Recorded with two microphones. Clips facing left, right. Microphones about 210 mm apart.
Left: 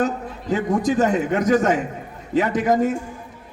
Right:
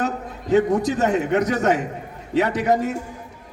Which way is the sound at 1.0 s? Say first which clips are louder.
Even; 45° left (ahead or behind).